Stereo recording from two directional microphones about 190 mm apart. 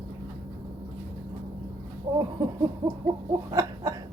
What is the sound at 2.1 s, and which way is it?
Speech, 25° right (ahead or behind).